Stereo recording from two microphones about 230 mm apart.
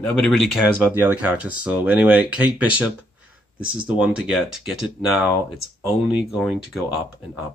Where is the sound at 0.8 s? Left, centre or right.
Centre.